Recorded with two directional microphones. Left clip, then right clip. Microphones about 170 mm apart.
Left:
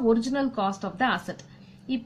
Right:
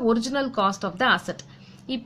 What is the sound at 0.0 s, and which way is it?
A woman's voice, 30° right (ahead or behind).